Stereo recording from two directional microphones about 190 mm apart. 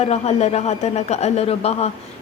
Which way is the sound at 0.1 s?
35° left (ahead or behind).